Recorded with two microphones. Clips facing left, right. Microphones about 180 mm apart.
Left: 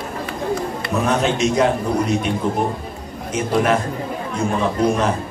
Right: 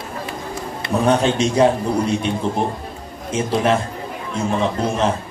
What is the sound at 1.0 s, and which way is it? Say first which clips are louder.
Speech: right 2 dB; 30° right (ahead or behind).